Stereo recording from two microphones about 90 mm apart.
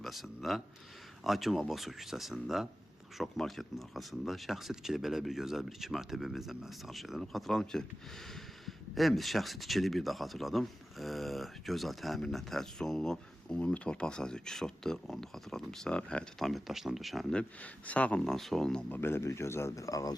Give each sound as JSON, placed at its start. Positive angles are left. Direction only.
{"t": 0.0, "sound": "speech", "side_deg": 0}
{"t": 16.5, "sound": "speech", "side_deg": 0}
{"t": 17.3, "sound": "speech", "side_deg": 15}
{"t": 18.3, "sound": "speech", "side_deg": 5}
{"t": 18.9, "sound": "speech", "side_deg": 25}